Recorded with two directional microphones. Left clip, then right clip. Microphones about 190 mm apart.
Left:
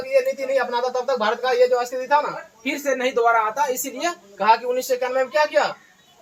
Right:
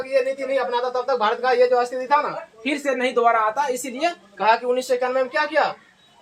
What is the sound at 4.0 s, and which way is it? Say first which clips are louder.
Speech: right 2 dB; 35° right (ahead or behind).